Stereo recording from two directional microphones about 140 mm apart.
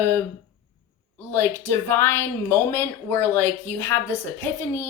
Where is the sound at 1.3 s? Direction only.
15° left (ahead or behind).